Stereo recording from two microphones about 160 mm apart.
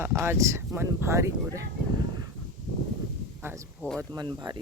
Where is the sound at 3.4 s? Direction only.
15° right (ahead or behind).